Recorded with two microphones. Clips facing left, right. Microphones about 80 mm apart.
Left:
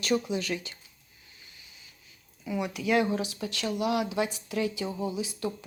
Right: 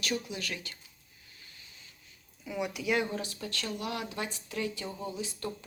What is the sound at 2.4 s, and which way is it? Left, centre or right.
Speech, centre.